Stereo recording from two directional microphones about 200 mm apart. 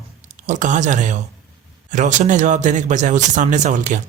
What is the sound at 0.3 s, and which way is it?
Speech, 40° right (ahead or behind).